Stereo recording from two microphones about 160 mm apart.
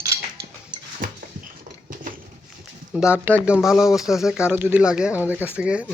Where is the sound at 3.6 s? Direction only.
5° right (ahead or behind).